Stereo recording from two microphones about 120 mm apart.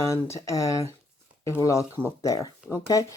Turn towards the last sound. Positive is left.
turn(degrees=30)  # may be behind; listen again after turning